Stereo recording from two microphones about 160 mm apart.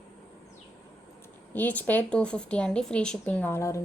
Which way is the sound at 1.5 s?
10° left (ahead or behind).